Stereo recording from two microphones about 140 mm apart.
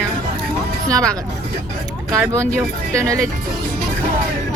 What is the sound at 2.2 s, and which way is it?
Speech, 20° right (ahead or behind).